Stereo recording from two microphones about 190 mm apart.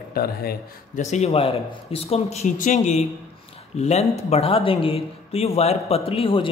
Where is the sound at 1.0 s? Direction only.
35° left (ahead or behind).